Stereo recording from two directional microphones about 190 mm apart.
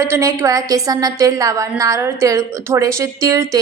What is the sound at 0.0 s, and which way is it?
A woman's voice, 15° right (ahead or behind).